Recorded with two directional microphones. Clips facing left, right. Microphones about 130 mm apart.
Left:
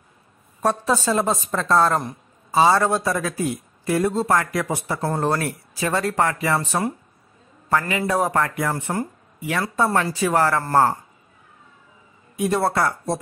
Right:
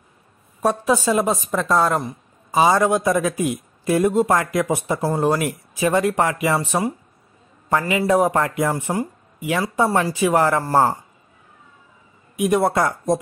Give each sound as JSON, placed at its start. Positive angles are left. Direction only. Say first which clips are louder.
{"t": 0.6, "sound": "a woman's voice", "louder": "right 2 dB", "side_deg": -10}
{"t": 5.0, "sound": "a woman's voice", "louder": "right 2 dB", "side_deg": -10}
{"t": 7.8, "sound": "speech", "louder": "right 4 dB", "side_deg": -20}
{"t": 12.4, "sound": "a woman's voice", "louder": "right 3 dB", "side_deg": -15}